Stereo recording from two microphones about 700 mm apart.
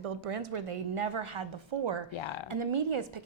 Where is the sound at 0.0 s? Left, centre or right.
Right.